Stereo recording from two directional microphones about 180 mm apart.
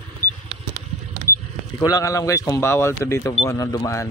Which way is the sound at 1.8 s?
20° left (ahead or behind).